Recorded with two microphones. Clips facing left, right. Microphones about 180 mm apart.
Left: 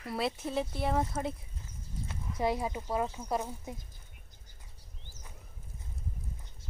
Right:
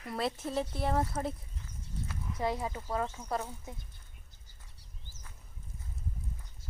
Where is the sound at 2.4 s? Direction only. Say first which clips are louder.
Left 3 dB; 15° left (ahead or behind).